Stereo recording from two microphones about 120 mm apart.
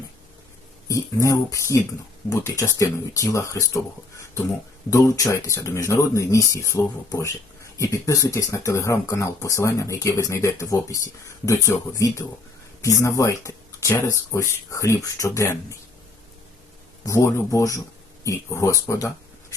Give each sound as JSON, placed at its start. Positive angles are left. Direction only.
{"t": 0.9, "sound": "speech", "side_deg": 25}
{"t": 4.9, "sound": "speech", "side_deg": 25}
{"t": 17.1, "sound": "speech", "side_deg": 25}
{"t": 18.9, "sound": "a sound", "side_deg": 25}